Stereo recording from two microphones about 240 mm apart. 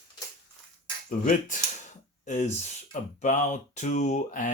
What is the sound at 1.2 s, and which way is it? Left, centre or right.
Speech, left.